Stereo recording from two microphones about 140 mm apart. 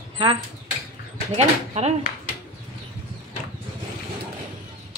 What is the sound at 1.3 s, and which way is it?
Speech, 50° right (ahead or behind).